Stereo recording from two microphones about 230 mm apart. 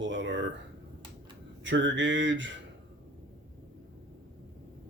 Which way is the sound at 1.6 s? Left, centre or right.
Right.